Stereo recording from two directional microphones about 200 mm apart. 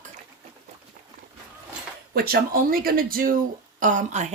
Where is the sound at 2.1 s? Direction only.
45° right (ahead or behind).